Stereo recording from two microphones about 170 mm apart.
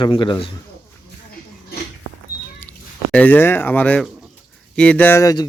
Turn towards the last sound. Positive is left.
turn(degrees=20)  # may be behind; listen again after turning